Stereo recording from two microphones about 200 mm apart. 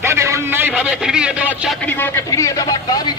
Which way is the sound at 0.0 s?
15° right (ahead or behind).